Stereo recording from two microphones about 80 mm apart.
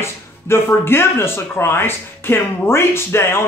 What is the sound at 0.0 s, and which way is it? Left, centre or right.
Speech, left.